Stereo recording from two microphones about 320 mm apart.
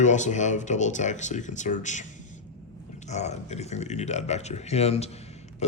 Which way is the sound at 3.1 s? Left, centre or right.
Left.